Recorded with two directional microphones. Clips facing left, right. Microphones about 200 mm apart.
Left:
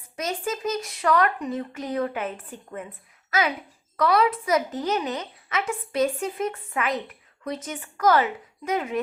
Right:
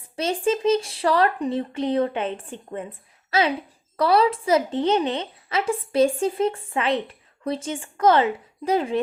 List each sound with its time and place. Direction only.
0.2 s a woman's voice: 30° right (ahead or behind)